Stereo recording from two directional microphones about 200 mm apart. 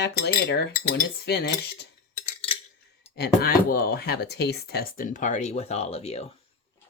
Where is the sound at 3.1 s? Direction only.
50° left (ahead or behind); by 6.3 s 30° left (ahead or behind).